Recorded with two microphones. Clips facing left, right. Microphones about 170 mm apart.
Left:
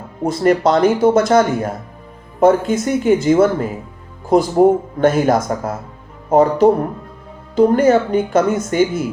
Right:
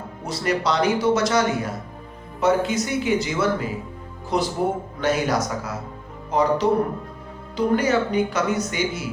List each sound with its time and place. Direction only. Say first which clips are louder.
0.2 s speech: left 10 dB; 50° left (ahead or behind)